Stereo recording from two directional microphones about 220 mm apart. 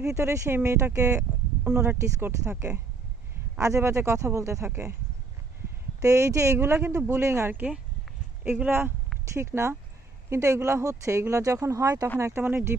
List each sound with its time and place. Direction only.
0.0 s speech: 10° right (ahead or behind)
5.9 s speech: 15° right (ahead or behind)